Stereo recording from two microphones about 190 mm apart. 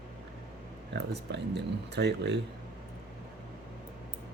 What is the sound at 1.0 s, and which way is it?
Speech, 60° right (ahead or behind).